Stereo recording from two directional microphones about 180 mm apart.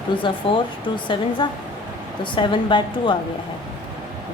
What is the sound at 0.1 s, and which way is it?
Speech, 30° left (ahead or behind).